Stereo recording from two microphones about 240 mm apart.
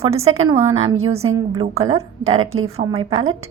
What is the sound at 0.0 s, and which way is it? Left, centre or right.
A woman's voice, right.